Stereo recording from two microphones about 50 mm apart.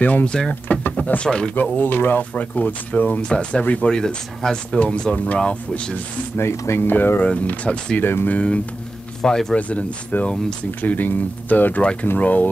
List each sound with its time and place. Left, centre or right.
0.0 s speech: left
1.2 s speech: centre
1.5 s speech: left
3.2 s speech: left
3.9 s speech: centre
6.5 s speech: left
6.8 s speech: left
7.2 s speech: left
8.0 s speech: left
8.3 s speech: left
9.2 s speech: centre
9.6 s speech: left
11.8 s speech: left